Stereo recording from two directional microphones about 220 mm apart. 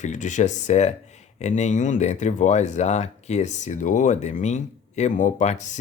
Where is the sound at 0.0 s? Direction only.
35° left (ahead or behind).